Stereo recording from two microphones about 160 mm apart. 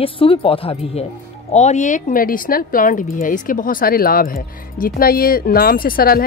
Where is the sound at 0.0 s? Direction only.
35° left (ahead or behind).